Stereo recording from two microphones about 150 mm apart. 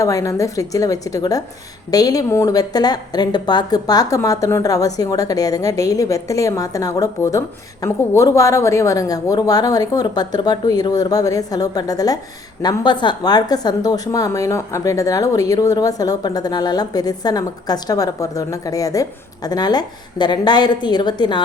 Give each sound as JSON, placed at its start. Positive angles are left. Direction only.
{"t": 0.0, "sound": "speech", "side_deg": 20}